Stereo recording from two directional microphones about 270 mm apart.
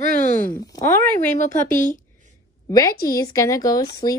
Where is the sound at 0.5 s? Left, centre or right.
Centre.